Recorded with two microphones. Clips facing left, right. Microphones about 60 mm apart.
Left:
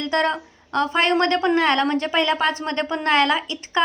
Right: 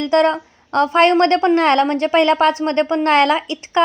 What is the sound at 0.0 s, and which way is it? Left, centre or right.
A woman's voice, right.